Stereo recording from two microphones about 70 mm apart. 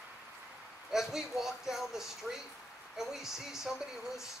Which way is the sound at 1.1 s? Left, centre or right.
Centre.